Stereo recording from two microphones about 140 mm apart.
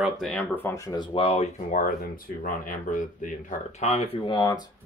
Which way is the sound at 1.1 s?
45° left (ahead or behind).